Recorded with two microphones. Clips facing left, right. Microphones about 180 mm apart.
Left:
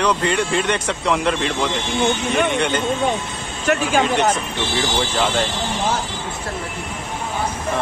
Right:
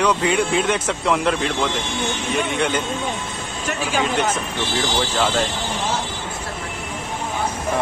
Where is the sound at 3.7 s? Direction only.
65° left (ahead or behind).